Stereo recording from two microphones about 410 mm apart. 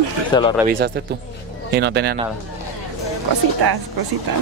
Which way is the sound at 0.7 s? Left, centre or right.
Right.